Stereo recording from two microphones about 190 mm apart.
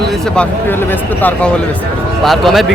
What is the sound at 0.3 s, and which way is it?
A man's voice, 10° left (ahead or behind).